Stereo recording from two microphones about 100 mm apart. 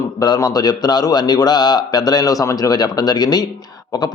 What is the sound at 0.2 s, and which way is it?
A man's voice, 40° left (ahead or behind).